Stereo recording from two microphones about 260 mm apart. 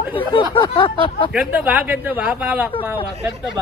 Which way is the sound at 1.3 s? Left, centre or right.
Centre.